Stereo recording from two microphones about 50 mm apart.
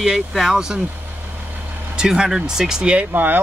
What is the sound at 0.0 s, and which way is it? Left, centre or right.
Speech, centre.